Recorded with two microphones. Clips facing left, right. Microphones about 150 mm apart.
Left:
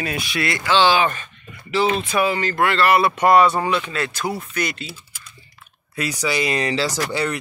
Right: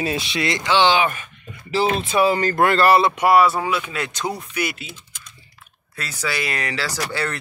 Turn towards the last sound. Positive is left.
turn(degrees=15)  # may be behind; listen again after turning